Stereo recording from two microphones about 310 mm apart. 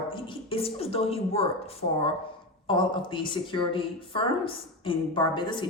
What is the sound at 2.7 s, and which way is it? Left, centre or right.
A woman's voice, centre.